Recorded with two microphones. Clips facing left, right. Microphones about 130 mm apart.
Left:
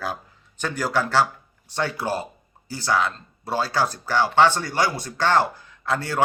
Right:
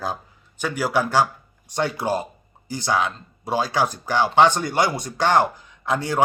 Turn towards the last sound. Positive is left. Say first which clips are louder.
# right 2 dB
turn(degrees=-15)  # may be behind; listen again after turning